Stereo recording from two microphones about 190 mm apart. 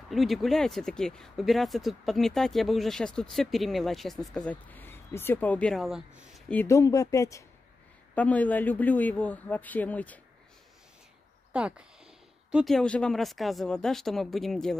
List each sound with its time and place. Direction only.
0.1 s speech: centre (ahead or behind)
6.5 s speech: 15° left (ahead or behind)
11.5 s speech: 5° right (ahead or behind)